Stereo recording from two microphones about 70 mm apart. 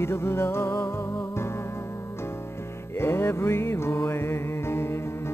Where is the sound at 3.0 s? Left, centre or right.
Left.